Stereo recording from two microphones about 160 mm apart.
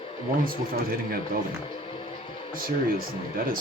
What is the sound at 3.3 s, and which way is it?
Speech, 60° right (ahead or behind).